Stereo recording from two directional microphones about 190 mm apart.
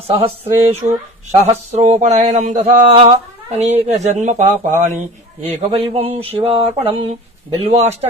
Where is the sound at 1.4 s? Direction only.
35° right (ahead or behind).